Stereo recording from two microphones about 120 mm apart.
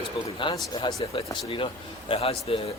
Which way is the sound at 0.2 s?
45° left (ahead or behind).